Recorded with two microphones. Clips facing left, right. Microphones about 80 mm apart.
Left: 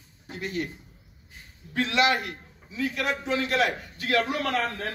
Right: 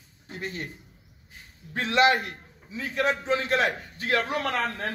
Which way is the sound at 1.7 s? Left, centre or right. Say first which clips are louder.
Right 2 dB; right.